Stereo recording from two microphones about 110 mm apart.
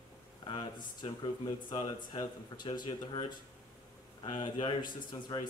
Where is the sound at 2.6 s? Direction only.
45° left (ahead or behind).